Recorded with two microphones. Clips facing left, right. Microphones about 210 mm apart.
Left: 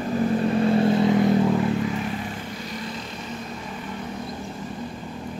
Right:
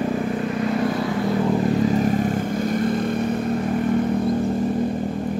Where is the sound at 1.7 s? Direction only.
40° right (ahead or behind); by 4.0 s 55° right (ahead or behind).